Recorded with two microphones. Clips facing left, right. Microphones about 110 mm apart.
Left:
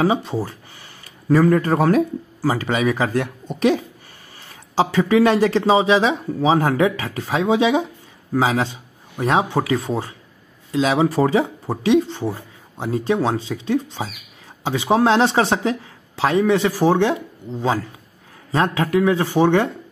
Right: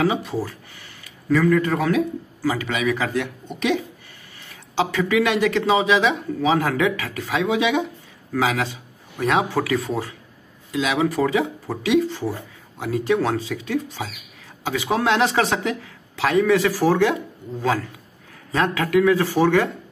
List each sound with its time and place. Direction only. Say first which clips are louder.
0.0 s a man's voice: left 2 dB; 30° left (ahead or behind)